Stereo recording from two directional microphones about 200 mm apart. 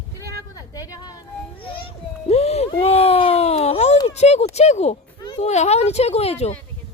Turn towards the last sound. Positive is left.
turn(degrees=30)  # may be behind; listen again after turning